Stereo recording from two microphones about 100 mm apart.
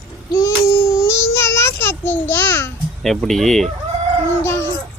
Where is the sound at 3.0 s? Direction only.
5° left (ahead or behind).